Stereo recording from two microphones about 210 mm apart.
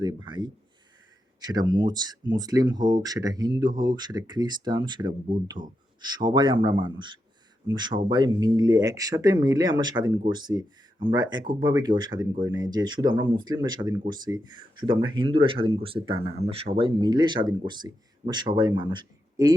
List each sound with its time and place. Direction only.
0.0 s speech: 20° right (ahead or behind)